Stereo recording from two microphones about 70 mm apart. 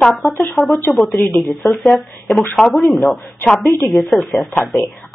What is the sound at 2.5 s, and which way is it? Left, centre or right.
Speech, centre.